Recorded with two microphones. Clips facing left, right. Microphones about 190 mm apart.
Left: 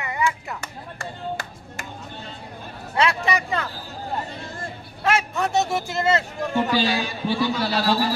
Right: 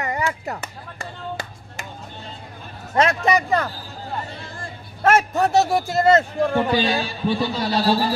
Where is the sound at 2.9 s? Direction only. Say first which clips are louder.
Right 4 dB; 45° right (ahead or behind).